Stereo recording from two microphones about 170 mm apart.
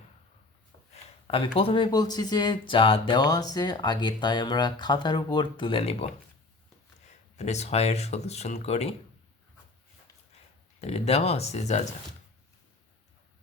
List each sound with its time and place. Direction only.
1.5 s speech: 30° left (ahead or behind)
7.1 s speech: 40° left (ahead or behind)
10.8 s speech: 35° left (ahead or behind)